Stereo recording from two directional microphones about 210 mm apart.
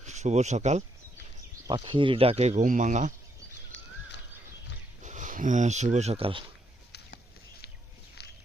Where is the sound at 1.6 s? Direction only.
25° right (ahead or behind).